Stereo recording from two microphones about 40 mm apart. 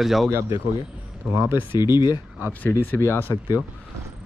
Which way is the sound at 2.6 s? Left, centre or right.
Left.